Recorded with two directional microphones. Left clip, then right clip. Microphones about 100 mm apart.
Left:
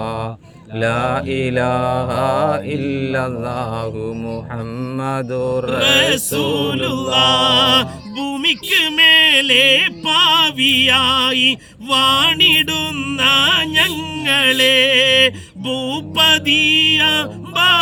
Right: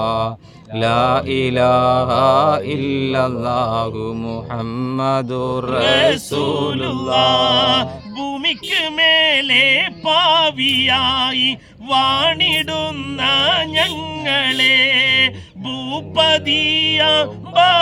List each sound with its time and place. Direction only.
0.0 s a sound: 50° right (ahead or behind)
0.8 s mantra: 45° right (ahead or behind)
5.8 s music: 20° right (ahead or behind)